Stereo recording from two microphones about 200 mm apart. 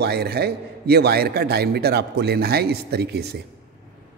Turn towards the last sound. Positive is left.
turn(degrees=-55)  # may be behind; listen again after turning